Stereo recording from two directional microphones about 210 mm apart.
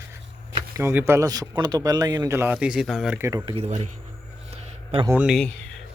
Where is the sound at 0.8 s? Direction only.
10° right (ahead or behind); by 3.9 s 35° right (ahead or behind).